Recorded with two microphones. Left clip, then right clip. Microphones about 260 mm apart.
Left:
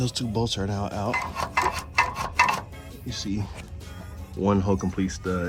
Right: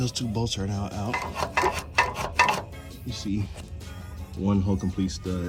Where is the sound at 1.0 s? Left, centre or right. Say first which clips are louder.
Even; centre.